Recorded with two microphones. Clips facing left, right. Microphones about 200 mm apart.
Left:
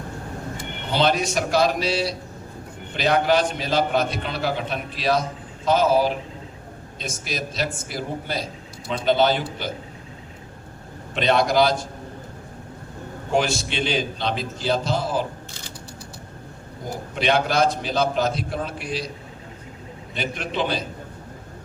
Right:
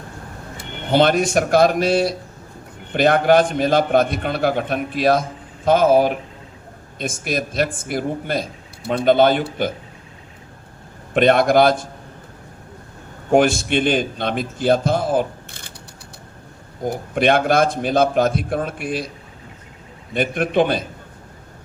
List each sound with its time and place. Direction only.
0.5 s a man's voice: 55° right (ahead or behind)
11.1 s a man's voice: 55° right (ahead or behind)
13.3 s a man's voice: 55° right (ahead or behind)
16.9 s a man's voice: 50° right (ahead or behind)
20.1 s a man's voice: 55° right (ahead or behind)